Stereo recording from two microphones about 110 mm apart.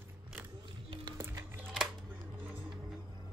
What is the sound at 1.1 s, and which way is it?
Music, 25° right (ahead or behind).